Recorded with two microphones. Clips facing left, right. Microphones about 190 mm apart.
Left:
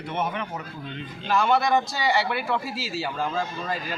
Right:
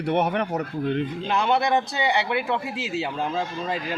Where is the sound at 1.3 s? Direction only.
20° right (ahead or behind).